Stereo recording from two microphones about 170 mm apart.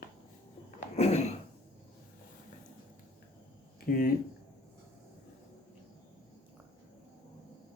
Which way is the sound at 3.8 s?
55° left (ahead or behind).